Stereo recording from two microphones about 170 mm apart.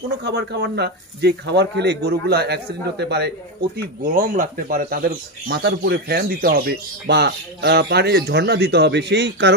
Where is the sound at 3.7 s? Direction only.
55° right (ahead or behind).